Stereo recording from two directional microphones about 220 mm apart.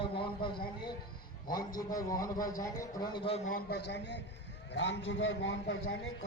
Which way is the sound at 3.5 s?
40° left (ahead or behind).